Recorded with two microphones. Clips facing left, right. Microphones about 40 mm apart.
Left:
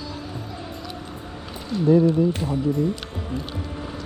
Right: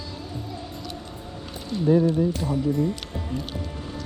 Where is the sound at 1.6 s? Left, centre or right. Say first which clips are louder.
Left 3 dB; centre.